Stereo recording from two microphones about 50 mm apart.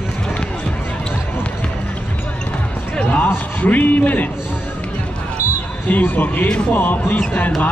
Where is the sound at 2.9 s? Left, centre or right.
Left.